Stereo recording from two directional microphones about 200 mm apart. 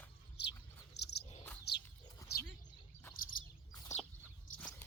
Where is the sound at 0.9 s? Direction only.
55° left (ahead or behind).